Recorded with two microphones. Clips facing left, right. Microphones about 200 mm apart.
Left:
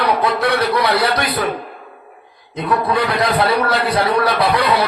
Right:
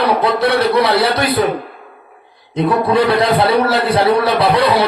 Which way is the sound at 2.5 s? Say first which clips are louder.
Right 4 dB; 25° right (ahead or behind).